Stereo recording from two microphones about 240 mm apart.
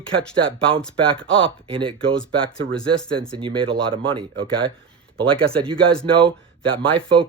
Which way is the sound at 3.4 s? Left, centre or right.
Right.